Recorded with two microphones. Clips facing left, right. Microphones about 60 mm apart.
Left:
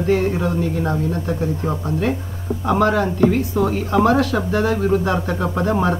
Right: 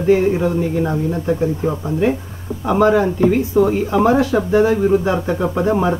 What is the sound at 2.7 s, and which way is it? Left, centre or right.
Speech, centre.